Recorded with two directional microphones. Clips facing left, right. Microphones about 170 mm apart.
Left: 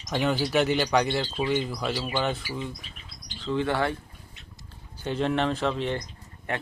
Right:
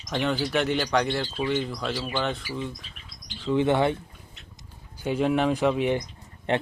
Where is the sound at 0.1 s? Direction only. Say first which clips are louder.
Left 1 dB; 5° left (ahead or behind).